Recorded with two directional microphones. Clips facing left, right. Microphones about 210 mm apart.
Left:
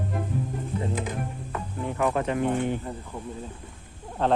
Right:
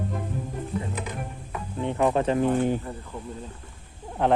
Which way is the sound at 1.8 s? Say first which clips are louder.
Right 3 dB; 25° right (ahead or behind).